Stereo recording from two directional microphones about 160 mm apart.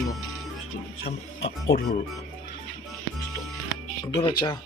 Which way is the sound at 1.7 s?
65° left (ahead or behind).